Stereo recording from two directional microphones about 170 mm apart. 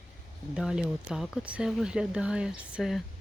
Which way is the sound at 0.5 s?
5° right (ahead or behind).